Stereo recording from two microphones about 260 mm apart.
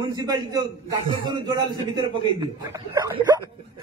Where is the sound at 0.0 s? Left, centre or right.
Centre.